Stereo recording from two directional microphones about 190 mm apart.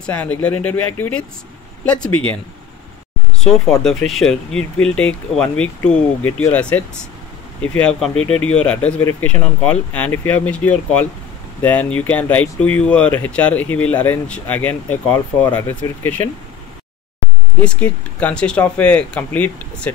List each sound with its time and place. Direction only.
0.0 s speech: 10° left (ahead or behind)
3.8 s speech: centre (ahead or behind)
17.6 s speech: 5° left (ahead or behind)